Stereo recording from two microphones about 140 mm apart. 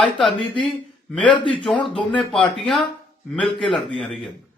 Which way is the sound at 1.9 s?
5° left (ahead or behind).